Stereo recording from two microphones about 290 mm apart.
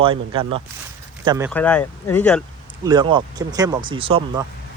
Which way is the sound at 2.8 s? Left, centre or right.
Centre.